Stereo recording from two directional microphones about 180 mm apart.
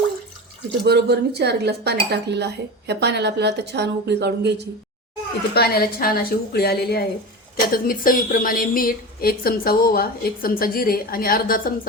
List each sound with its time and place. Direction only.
0.9 s speech: 65° right (ahead or behind)
5.5 s a woman's voice: 60° left (ahead or behind)